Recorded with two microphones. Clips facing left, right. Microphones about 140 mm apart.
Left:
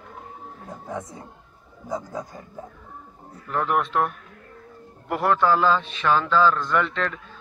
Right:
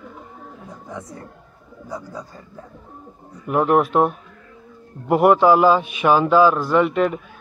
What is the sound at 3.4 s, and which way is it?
Speech, 20° right (ahead or behind).